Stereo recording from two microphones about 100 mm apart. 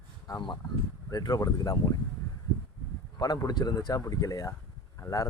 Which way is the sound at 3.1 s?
40° left (ahead or behind).